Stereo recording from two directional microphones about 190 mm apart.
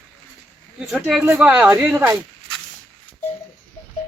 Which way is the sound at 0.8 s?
Centre (ahead or behind).